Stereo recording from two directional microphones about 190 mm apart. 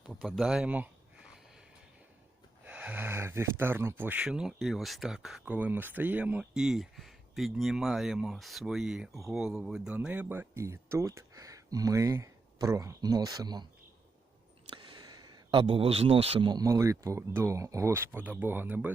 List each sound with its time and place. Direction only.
0.1 s speech: centre (ahead or behind)
2.6 s speech: 5° right (ahead or behind)
14.7 s speech: 25° right (ahead or behind); by 18.9 s 10° right (ahead or behind)